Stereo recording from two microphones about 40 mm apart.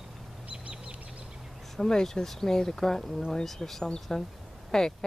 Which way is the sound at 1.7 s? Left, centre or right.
Centre.